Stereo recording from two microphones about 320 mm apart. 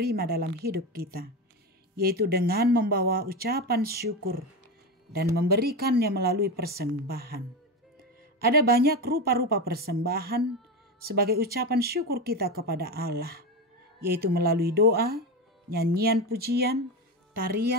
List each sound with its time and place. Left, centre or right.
0.0 s speech: right
8.5 s speech: right